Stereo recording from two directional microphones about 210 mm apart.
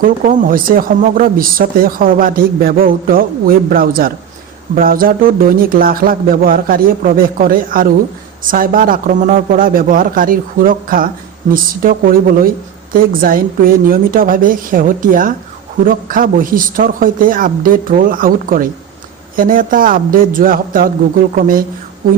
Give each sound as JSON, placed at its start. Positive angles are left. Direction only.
{"t": 0.0, "sound": "speech", "side_deg": -40}